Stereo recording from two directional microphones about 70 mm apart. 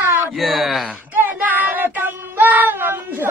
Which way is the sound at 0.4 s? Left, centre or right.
Centre.